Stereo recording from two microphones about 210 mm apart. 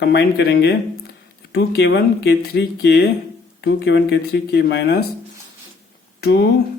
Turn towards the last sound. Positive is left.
turn(degrees=50)  # may be behind; listen again after turning